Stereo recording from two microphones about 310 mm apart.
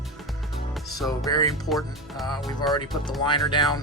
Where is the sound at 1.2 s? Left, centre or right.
Centre.